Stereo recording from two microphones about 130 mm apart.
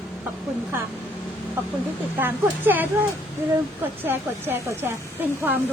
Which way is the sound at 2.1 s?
15° right (ahead or behind).